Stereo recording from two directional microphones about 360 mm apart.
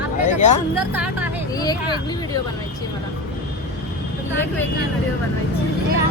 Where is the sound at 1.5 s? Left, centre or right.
Centre.